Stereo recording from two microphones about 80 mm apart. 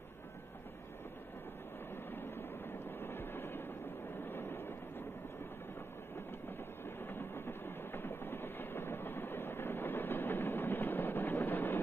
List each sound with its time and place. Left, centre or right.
3.0 s train: left
6.8 s train: left